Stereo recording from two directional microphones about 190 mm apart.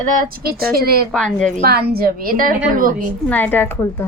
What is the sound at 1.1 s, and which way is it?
Speech, 5° left (ahead or behind).